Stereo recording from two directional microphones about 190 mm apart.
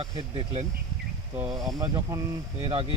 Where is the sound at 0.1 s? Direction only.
25° right (ahead or behind).